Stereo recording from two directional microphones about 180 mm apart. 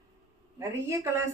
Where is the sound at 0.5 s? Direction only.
20° right (ahead or behind).